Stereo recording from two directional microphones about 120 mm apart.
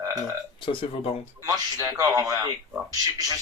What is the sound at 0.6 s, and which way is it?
Speech, 45° left (ahead or behind).